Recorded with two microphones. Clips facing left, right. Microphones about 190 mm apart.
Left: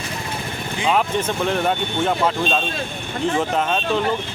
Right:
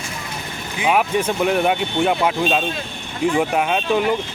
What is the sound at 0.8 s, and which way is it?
Speech, 10° right (ahead or behind).